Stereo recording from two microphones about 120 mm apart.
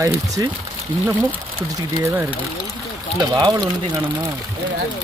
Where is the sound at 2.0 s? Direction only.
20° right (ahead or behind).